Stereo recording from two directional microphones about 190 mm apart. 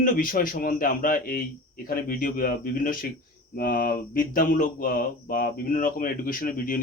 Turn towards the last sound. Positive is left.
turn(degrees=50)  # may be behind; listen again after turning